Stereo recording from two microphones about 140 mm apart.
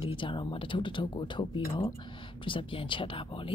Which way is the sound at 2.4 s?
40° left (ahead or behind).